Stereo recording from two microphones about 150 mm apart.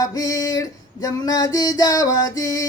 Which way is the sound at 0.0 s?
25° left (ahead or behind).